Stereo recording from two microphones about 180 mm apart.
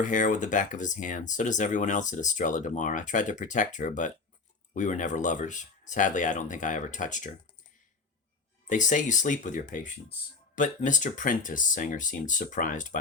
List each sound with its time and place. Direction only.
0.0 s speech: 45° left (ahead or behind)
8.6 s speech: 45° left (ahead or behind)